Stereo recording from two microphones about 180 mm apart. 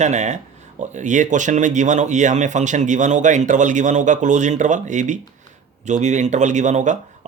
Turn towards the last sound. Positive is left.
turn(degrees=-40)  # may be behind; listen again after turning